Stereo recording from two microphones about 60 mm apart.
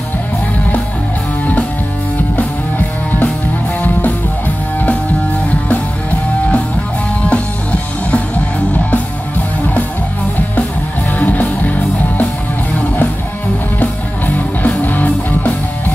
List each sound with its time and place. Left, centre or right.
7.2 s music: left
11.1 s music: left
13.7 s music: left